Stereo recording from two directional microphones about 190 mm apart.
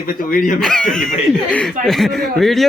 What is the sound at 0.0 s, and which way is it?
Speech, 45° left (ahead or behind).